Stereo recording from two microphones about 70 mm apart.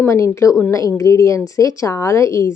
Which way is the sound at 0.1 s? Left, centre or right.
Left.